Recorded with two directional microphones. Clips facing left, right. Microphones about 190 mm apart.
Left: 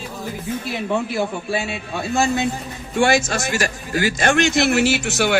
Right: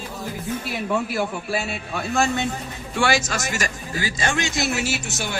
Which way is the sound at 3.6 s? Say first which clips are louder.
Left 6 dB; 70° left (ahead or behind).